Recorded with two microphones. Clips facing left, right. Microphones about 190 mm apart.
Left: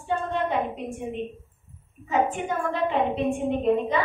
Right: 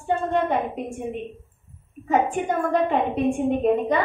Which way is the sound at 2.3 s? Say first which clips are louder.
Right 5 dB; 50° right (ahead or behind).